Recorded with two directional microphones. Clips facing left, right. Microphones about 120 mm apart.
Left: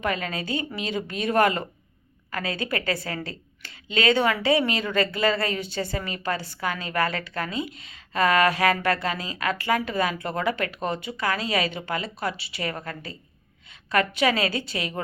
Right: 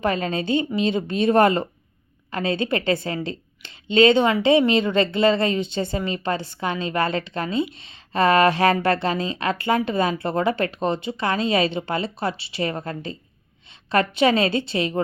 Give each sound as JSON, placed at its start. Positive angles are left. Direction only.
{"t": 0.0, "sound": "speech", "side_deg": -30}